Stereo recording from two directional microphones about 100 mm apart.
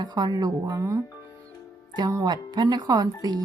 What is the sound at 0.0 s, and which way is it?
Speech, 45° right (ahead or behind).